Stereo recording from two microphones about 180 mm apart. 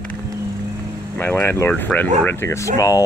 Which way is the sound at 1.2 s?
10° left (ahead or behind).